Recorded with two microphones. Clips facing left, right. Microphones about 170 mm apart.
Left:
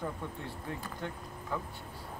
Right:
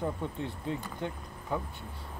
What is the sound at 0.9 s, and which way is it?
Speech, 20° right (ahead or behind).